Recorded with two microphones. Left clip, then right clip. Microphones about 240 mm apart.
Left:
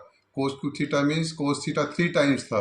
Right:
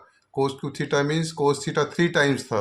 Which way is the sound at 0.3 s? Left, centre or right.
Right.